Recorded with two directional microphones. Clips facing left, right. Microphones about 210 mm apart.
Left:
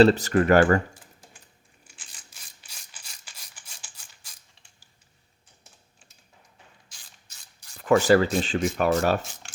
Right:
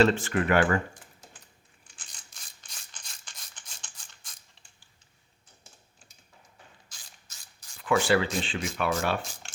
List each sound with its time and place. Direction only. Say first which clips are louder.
0.0 s speech: left 5 dB; 40° left (ahead or behind)
2.3 s a sound: even; 5° left (ahead or behind)
7.8 s speech: left 6 dB; 45° left (ahead or behind)